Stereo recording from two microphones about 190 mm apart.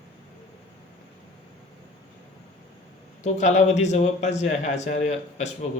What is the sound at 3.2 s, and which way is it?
A man's voice, 40° left (ahead or behind).